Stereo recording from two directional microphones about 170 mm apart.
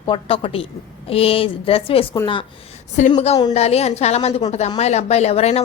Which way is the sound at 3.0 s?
45° left (ahead or behind).